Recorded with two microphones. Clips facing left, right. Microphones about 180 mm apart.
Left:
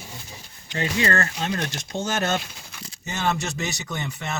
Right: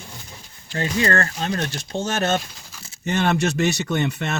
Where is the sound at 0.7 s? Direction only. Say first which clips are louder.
Right 2 dB; 35° right (ahead or behind).